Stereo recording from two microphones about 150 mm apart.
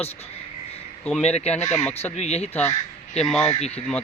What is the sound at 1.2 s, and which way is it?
Speech, 45° left (ahead or behind).